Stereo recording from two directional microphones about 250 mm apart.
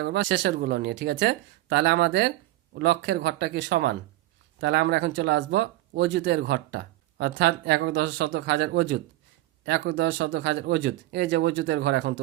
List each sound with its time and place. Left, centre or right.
0.0 s speech: right